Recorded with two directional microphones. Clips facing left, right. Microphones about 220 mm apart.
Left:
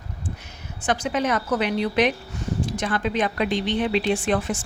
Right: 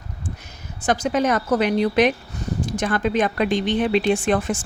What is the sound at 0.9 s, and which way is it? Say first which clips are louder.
A woman's voice: right 3 dB; 40° right (ahead or behind).